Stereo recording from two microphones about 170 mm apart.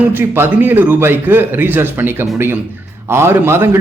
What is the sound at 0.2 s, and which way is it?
Speech, 10° right (ahead or behind).